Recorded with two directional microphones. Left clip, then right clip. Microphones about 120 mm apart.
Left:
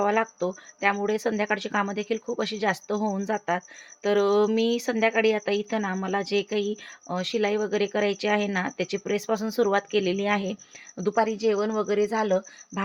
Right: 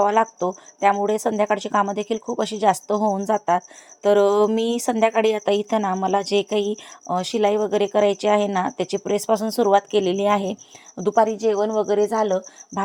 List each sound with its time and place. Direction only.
0.0 s a woman's voice: 25° right (ahead or behind)